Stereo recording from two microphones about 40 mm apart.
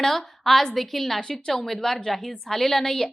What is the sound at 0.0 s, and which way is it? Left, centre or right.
A woman's voice, centre.